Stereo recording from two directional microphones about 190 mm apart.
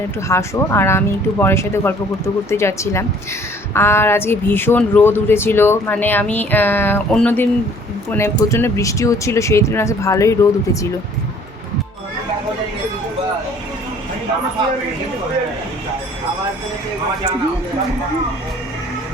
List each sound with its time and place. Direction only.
0.3 s speech: 15° left (ahead or behind)